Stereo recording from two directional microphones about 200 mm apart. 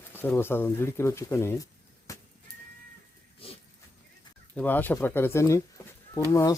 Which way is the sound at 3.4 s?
30° left (ahead or behind).